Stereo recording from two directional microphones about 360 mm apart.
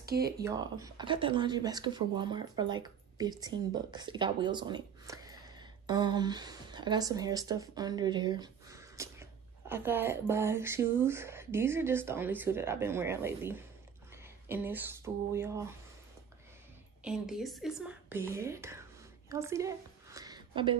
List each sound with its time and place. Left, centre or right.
0.0 s speech: right
0.4 s speech: centre
17.0 s speech: centre
19.2 s a sound: centre